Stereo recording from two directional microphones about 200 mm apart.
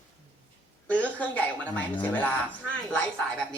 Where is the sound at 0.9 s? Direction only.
5° left (ahead or behind).